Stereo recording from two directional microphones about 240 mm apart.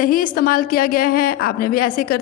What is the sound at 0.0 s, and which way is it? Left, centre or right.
A woman's voice, left.